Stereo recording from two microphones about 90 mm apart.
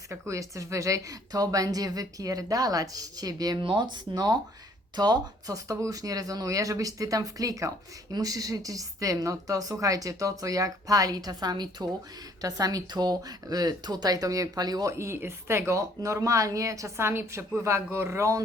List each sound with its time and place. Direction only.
0.1 s speech: 35° right (ahead or behind)
3.6 s speech: 65° right (ahead or behind)
4.1 s a woman's voice: 50° right (ahead or behind)
14.9 s a woman's voice: 30° right (ahead or behind)